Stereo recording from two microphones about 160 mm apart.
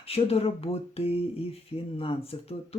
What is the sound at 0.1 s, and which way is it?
Speech, 40° left (ahead or behind).